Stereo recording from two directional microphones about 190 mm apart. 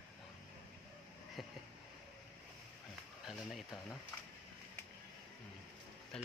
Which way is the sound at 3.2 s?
Centre (ahead or behind).